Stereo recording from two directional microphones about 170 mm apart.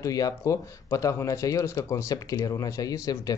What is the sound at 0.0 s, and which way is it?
Speech, 20° left (ahead or behind).